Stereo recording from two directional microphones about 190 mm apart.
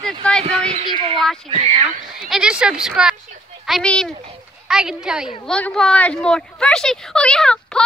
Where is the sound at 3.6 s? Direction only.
Centre (ahead or behind).